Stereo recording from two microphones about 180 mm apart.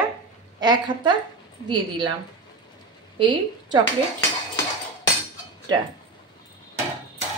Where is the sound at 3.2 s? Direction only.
25° right (ahead or behind).